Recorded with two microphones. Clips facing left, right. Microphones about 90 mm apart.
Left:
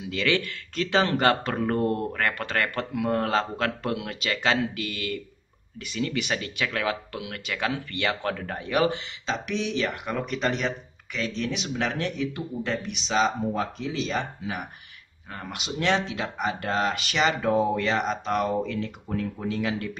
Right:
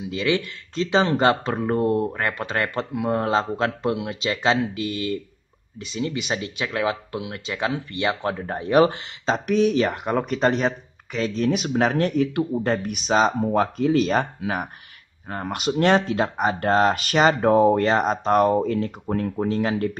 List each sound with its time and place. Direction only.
0.1 s speech: 20° right (ahead or behind); by 20.0 s 45° right (ahead or behind)